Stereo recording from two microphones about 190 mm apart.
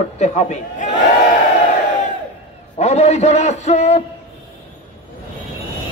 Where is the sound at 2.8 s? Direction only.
35° left (ahead or behind).